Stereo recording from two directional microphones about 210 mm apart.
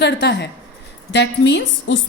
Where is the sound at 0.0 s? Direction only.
55° left (ahead or behind).